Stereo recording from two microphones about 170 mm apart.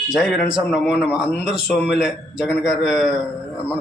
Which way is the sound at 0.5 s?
Centre (ahead or behind).